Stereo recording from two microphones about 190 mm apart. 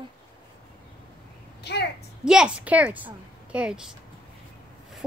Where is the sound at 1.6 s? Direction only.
60° left (ahead or behind).